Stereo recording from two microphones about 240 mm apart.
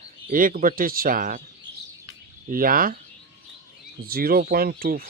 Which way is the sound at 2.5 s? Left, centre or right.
Right.